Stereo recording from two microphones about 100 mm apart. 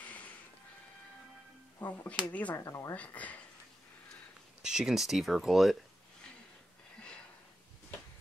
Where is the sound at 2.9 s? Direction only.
15° left (ahead or behind).